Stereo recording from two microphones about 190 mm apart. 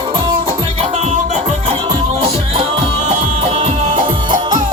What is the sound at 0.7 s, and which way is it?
Music, 35° right (ahead or behind).